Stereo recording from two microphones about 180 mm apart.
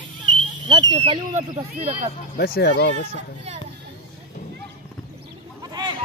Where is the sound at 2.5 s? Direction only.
70° left (ahead or behind).